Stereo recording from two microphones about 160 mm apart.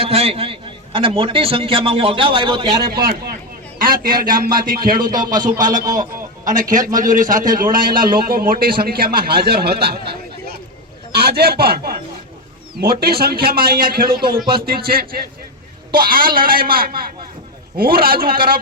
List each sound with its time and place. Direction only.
0.0 s a man's voice: 40° right (ahead or behind)
3.8 s a man's voice: 65° right (ahead or behind)
5.2 s speech: 25° right (ahead or behind)
5.5 s a man's voice: 55° right (ahead or behind)
5.8 s speech: 20° right (ahead or behind)
6.4 s a man's voice: 55° right (ahead or behind); by 9.9 s 80° right
11.1 s a man's voice: 80° right